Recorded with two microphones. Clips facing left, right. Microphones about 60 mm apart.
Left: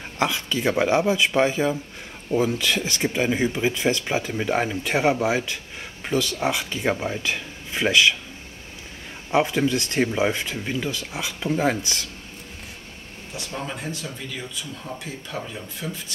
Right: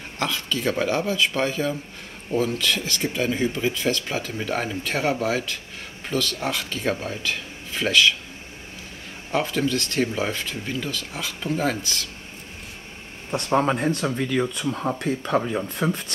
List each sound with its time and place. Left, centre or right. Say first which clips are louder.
0.2 s speech: left 2 dB; centre
9.3 s speech: left 3 dB; centre
13.3 s speech: right 11 dB; right